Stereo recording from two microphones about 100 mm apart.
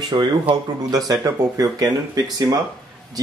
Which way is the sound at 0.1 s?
35° right (ahead or behind).